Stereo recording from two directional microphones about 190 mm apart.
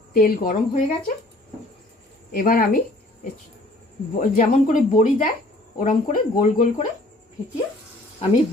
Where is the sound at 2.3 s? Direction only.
45° left (ahead or behind).